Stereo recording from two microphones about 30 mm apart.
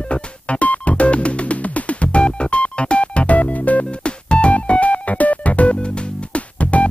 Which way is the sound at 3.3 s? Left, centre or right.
Left.